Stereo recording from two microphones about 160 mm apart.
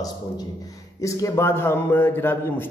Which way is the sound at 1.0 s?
20° left (ahead or behind).